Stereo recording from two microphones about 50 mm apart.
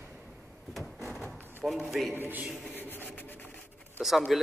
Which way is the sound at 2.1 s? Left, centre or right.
Right.